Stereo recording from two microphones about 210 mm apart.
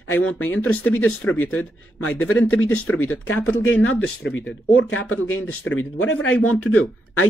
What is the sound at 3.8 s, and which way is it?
Speech, 60° left (ahead or behind).